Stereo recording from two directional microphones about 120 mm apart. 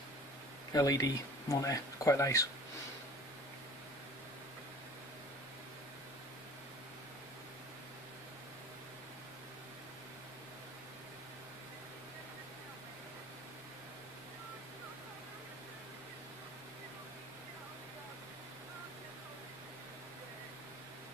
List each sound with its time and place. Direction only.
0.7 s speech: 30° left (ahead or behind)